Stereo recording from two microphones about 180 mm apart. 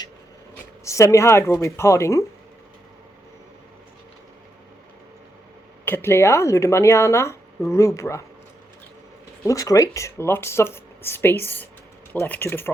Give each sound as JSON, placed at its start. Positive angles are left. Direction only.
{"t": 0.9, "sound": "speech", "side_deg": 15}
{"t": 5.8, "sound": "speech", "side_deg": 10}
{"t": 9.4, "sound": "speech", "side_deg": 15}